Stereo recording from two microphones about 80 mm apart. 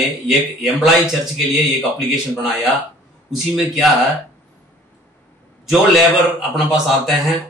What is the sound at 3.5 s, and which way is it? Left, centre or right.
Speech, centre.